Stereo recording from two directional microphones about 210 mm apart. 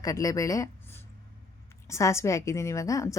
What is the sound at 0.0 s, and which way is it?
A woman's voice, 15° left (ahead or behind).